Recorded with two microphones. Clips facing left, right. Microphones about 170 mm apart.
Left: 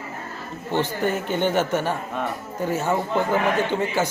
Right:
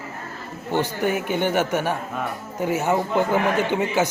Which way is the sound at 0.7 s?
10° right (ahead or behind).